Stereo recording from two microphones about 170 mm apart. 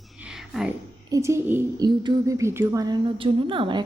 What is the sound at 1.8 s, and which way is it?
A woman's voice, 25° right (ahead or behind).